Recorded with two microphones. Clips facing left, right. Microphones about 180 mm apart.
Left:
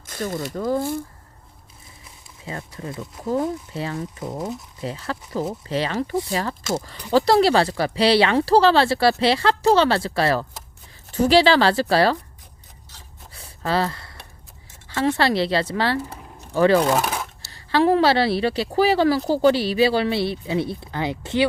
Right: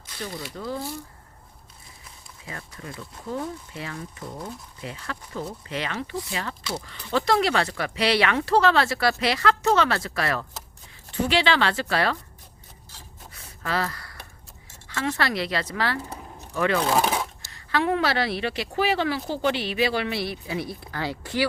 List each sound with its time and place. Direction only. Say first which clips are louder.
0.0 s speech: left 8 dB; 45° left (ahead or behind)
2.4 s speech: left 7 dB; 30° left (ahead or behind)
13.3 s gasp: left 5 dB; 30° left (ahead or behind)
14.8 s speech: left 6 dB; 30° left (ahead or behind)